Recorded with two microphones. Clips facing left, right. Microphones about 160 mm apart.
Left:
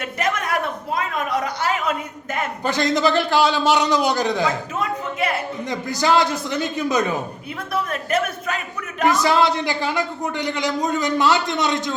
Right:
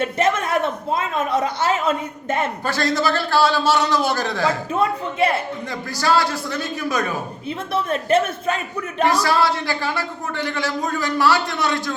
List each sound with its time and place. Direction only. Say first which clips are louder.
0.0 s a sound: right 4 dB; 25° right (ahead or behind)
2.6 s a man's voice: left 3 dB; 20° left (ahead or behind)
4.7 s speech: right 4 dB; 30° right (ahead or behind)
5.9 s a man's voice: left 1 dB; 20° left (ahead or behind)
7.7 s a man's voice: right 4 dB; 25° right (ahead or behind)
9.0 s a man's voice: left 2 dB; 20° left (ahead or behind)